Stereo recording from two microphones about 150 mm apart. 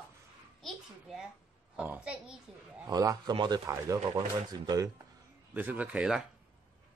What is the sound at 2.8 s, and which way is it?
A man's voice, 25° right (ahead or behind).